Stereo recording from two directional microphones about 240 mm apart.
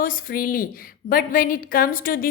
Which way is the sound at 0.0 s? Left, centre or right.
Left.